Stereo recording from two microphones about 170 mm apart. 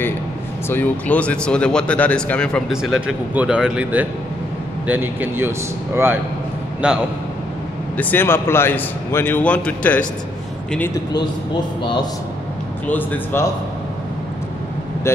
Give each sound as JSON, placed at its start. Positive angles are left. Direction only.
{"t": 0.7, "sound": "a man's voice", "side_deg": 10}
{"t": 6.8, "sound": "speech", "side_deg": -5}
{"t": 8.0, "sound": "a man's voice", "side_deg": 10}
{"t": 11.8, "sound": "a man's voice", "side_deg": 30}
{"t": 12.8, "sound": "a man's voice", "side_deg": 10}
{"t": 15.1, "sound": "a man's voice", "side_deg": 15}